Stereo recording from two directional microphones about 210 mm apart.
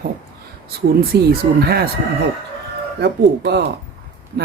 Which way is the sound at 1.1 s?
50° right (ahead or behind).